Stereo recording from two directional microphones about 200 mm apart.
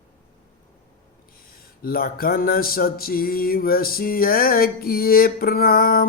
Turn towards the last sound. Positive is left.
turn(degrees=50)  # may be behind; listen again after turning